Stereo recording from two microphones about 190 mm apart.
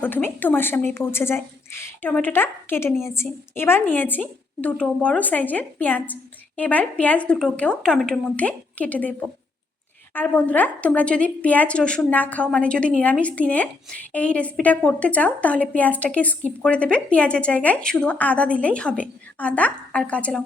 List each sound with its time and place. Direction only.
0.0 s a woman's voice: 10° left (ahead or behind)